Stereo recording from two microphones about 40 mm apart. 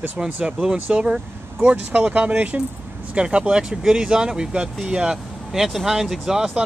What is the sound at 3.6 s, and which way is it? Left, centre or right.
Speech, centre.